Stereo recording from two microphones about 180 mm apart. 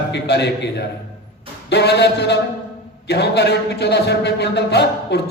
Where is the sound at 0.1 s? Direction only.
70° left (ahead or behind).